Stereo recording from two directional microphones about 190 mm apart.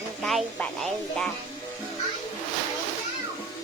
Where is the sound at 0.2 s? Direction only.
Centre (ahead or behind).